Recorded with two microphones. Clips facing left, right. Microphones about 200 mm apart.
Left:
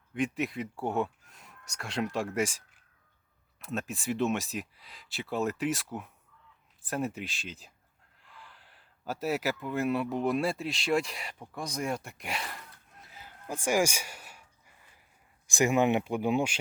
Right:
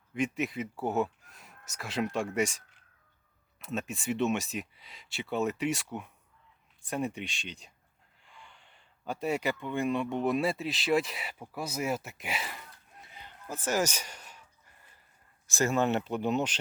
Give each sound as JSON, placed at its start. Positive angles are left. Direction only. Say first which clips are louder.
{"t": 0.1, "sound": "a man's voice", "louder": "even", "side_deg": 0}